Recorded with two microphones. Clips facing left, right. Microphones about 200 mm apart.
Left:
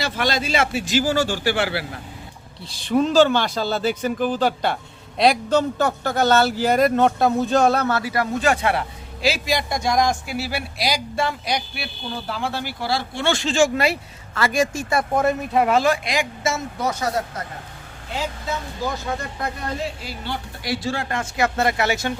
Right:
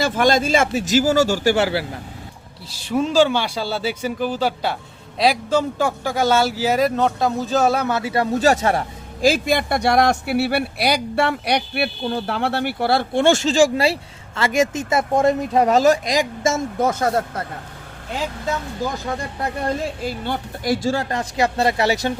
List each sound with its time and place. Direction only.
0.0 s speech: 50° right (ahead or behind)
2.8 s speech: 10° right (ahead or behind); by 8.8 s 40° right (ahead or behind)
9.2 s speech: 55° right (ahead or behind)
20.0 s speech: 50° right (ahead or behind); by 22.1 s 35° right (ahead or behind)